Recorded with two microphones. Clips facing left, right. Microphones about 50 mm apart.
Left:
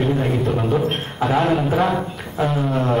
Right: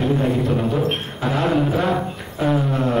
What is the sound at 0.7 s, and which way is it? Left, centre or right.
Speech, centre.